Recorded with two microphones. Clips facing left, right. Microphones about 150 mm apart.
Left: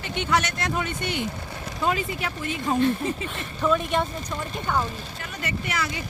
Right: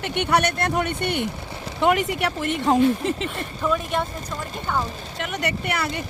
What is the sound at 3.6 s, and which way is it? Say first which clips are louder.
Speech: left 1 dB; 5° right (ahead or behind).